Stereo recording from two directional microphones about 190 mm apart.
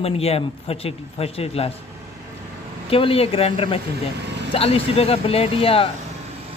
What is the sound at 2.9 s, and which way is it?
A man's voice, 30° left (ahead or behind).